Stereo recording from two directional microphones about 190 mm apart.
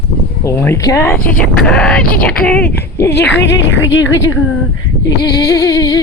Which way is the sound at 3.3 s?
70° left (ahead or behind).